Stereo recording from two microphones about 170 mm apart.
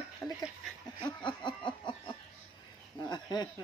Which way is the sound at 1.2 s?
30° left (ahead or behind).